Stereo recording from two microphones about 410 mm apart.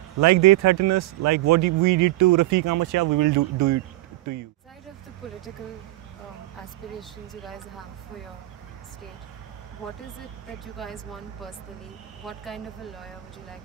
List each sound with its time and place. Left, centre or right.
0.2 s a man's voice: right
7.0 s speech: centre
10.8 s speech: centre
12.3 s speech: centre